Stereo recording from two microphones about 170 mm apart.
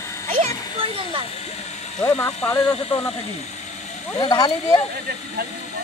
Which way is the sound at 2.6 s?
30° left (ahead or behind).